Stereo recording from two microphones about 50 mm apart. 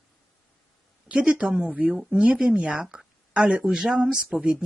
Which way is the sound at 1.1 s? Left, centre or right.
Centre.